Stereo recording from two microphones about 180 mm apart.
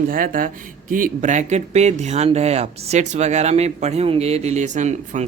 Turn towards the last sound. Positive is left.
turn(degrees=-40)  # may be behind; listen again after turning